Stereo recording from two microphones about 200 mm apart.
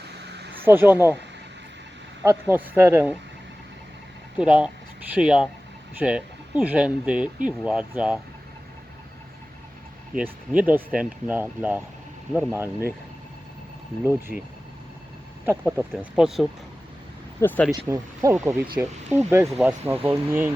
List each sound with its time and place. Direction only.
0.3 s a sound: 55° right (ahead or behind)
0.6 s speech: 10° right (ahead or behind)
2.2 s speech: 10° right (ahead or behind)
4.4 s speech: 5° right (ahead or behind)
10.2 s speech: 5° right (ahead or behind)
14.0 s speech: 10° right (ahead or behind)
15.4 s speech: 10° right (ahead or behind)
17.4 s speech: 10° left (ahead or behind)
17.7 s speech: 15° right (ahead or behind)